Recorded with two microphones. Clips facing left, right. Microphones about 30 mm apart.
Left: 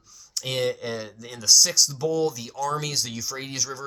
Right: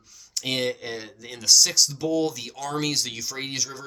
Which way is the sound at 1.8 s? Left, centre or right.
Right.